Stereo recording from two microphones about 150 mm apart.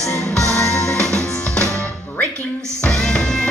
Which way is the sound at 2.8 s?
5° left (ahead or behind).